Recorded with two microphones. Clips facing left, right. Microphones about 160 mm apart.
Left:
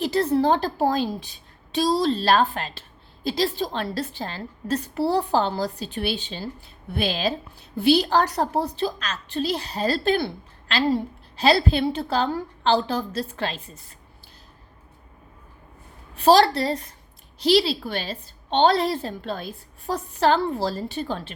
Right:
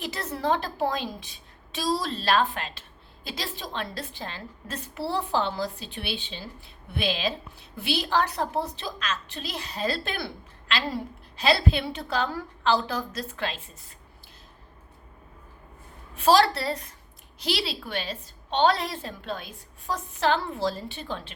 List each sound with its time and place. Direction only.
0.0 s a woman's voice: 30° left (ahead or behind)
16.1 s a woman's voice: 35° left (ahead or behind)